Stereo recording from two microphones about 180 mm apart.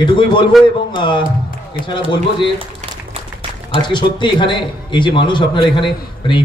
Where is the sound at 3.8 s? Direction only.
25° left (ahead or behind).